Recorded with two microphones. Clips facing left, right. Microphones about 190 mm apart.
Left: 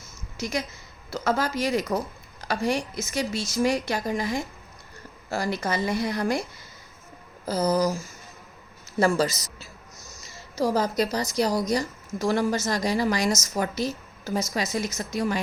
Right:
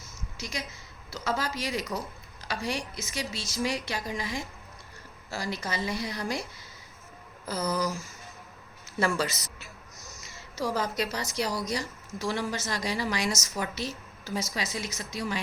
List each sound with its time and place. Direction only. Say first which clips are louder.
0.3 s a woman's voice: left 8 dB; 50° left (ahead or behind)
7.4 s speech: left 7 dB; 35° left (ahead or behind)
9.0 s a woman's voice: left 6 dB; 40° left (ahead or behind)